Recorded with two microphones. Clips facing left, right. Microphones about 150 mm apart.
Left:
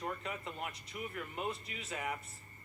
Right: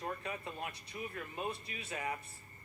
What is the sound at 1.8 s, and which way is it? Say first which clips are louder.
Speech: even; 20° left (ahead or behind).